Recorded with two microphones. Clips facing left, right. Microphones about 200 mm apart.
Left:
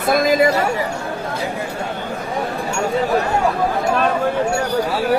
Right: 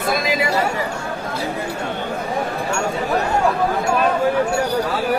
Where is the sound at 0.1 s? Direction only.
50° left (ahead or behind).